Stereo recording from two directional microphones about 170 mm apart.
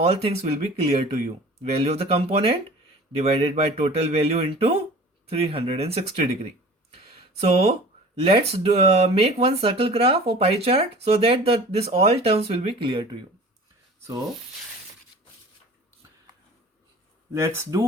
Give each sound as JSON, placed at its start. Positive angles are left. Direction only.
{"t": 0.0, "sound": "speech", "side_deg": -35}
{"t": 17.3, "sound": "speech", "side_deg": -15}